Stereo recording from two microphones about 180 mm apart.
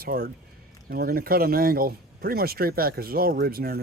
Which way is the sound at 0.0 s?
55° right (ahead or behind).